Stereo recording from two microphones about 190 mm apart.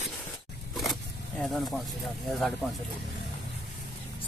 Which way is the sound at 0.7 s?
Centre (ahead or behind).